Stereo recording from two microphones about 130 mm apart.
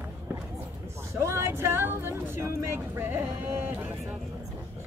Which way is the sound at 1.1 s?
20° right (ahead or behind).